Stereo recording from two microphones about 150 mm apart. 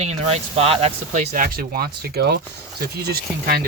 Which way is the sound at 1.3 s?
70° right (ahead or behind).